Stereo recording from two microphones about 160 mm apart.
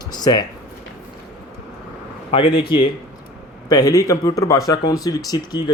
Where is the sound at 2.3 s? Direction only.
35° left (ahead or behind).